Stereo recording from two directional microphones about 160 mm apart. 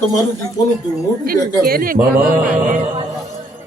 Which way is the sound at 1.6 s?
65° right (ahead or behind).